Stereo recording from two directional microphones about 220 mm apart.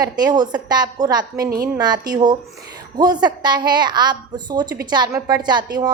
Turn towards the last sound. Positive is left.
turn(degrees=-20)  # may be behind; listen again after turning